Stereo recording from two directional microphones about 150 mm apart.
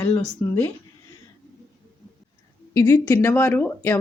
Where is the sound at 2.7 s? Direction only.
25° left (ahead or behind).